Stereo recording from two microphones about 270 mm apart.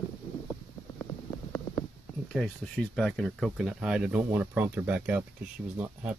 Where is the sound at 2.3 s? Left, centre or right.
Centre.